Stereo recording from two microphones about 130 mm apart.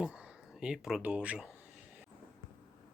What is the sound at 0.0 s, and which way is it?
Speech, 10° right (ahead or behind).